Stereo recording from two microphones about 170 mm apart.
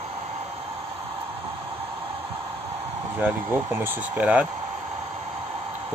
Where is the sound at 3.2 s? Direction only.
10° right (ahead or behind).